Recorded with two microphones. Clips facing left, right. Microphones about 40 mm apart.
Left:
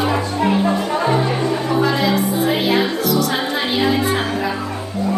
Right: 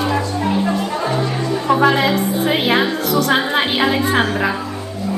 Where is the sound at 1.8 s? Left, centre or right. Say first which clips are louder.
Right 2 dB; right.